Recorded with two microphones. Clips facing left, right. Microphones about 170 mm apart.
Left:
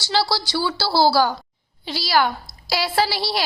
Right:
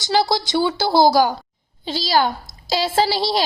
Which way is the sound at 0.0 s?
20° right (ahead or behind).